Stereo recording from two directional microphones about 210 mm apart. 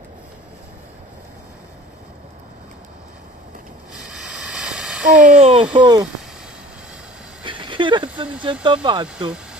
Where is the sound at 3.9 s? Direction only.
5° right (ahead or behind).